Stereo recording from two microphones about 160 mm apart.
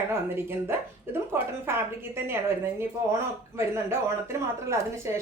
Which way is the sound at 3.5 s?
15° right (ahead or behind).